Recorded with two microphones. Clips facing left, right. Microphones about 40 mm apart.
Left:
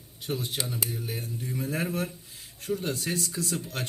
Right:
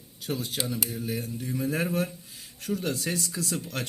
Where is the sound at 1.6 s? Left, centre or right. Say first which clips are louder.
Right 3 dB; right.